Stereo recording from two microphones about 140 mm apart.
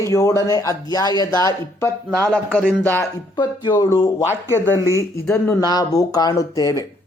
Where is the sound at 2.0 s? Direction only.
10° left (ahead or behind).